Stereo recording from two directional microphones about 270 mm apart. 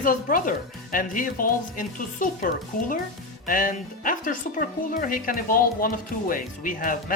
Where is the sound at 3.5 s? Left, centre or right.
Left.